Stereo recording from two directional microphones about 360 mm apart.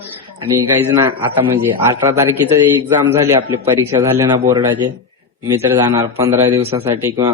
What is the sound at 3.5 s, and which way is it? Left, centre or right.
Speech, right.